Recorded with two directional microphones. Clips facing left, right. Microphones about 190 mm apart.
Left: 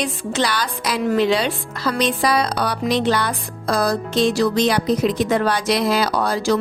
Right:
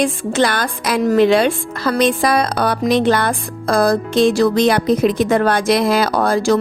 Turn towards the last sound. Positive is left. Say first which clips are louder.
# right 4 dB
turn(degrees=-50)  # may be behind; listen again after turning